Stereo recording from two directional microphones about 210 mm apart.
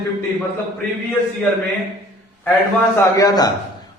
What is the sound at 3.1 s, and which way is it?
Speech, 15° left (ahead or behind).